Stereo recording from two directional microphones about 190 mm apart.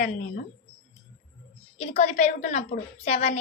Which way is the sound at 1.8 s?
35° left (ahead or behind).